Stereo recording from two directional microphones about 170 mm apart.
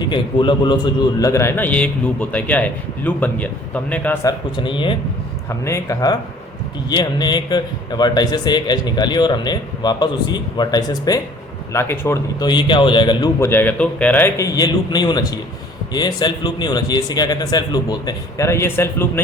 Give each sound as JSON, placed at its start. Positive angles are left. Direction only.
{"t": 0.0, "sound": "a man's voice", "side_deg": 25}
{"t": 5.6, "sound": "a man's voice", "side_deg": 20}
{"t": 13.4, "sound": "a man's voice", "side_deg": 10}